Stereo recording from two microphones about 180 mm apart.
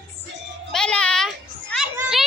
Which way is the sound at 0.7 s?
5° left (ahead or behind).